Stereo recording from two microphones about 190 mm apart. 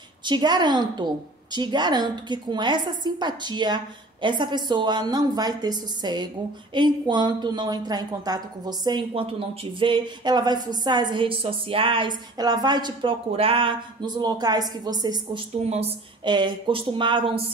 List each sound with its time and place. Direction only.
0.2 s a woman's voice: 25° right (ahead or behind)
15.6 s a woman's voice: 30° right (ahead or behind)